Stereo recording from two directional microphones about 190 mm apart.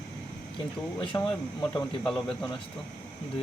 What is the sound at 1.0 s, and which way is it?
Speech, 25° left (ahead or behind).